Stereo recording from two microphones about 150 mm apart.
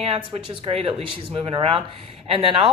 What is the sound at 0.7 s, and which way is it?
Speech, 40° right (ahead or behind).